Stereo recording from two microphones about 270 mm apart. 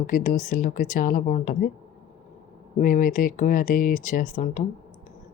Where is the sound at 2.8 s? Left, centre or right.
Left.